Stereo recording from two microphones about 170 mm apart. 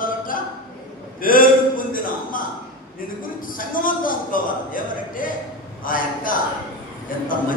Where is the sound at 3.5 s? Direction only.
55° left (ahead or behind).